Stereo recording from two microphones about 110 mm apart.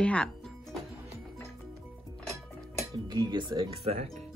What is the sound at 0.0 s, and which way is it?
Speech, 10° left (ahead or behind).